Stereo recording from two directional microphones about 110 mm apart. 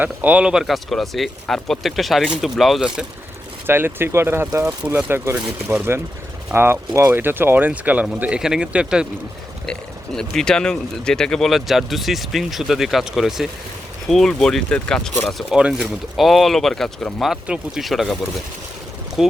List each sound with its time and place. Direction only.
0.0 s speech: 15° right (ahead or behind)
3.7 s speech: 20° right (ahead or behind)
10.2 s speech: 5° left (ahead or behind)